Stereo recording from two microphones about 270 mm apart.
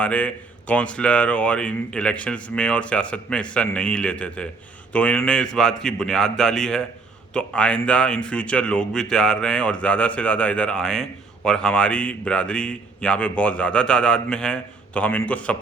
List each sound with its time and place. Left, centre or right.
0.0 s speech: centre